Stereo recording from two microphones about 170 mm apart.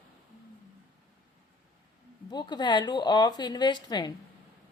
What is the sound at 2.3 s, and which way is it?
A woman's voice, 25° left (ahead or behind).